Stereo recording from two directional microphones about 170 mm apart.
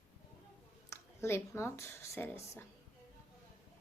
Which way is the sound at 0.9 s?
15° left (ahead or behind).